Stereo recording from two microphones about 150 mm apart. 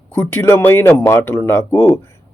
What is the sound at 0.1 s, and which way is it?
Speech, 15° left (ahead or behind).